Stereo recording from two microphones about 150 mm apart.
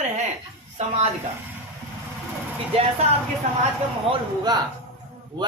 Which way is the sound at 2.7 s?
40° right (ahead or behind).